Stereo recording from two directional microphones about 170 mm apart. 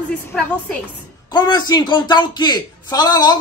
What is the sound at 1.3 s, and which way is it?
A man's voice, 25° left (ahead or behind).